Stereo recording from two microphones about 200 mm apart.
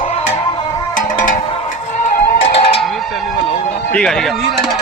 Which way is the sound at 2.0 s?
45° left (ahead or behind).